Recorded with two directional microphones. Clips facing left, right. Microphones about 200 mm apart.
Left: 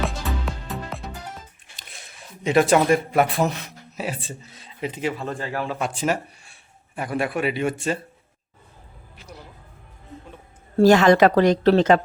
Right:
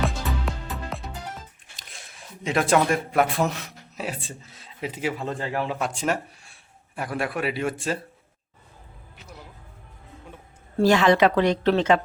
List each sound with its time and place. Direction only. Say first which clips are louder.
0.0 s music: even; centre (ahead or behind)
1.9 s a man's voice: even; centre (ahead or behind); by 5.7 s 20° right (ahead or behind)
5.8 s a man's voice: left 2 dB; 5° left (ahead or behind)
10.8 s speech: left 4 dB; 45° left (ahead or behind)